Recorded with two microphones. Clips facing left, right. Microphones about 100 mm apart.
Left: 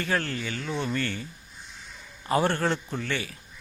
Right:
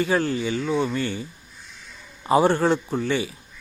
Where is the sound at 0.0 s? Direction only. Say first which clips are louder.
Right 7 dB; 10° right (ahead or behind).